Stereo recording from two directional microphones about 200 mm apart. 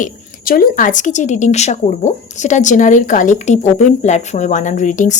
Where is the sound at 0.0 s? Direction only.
45° left (ahead or behind).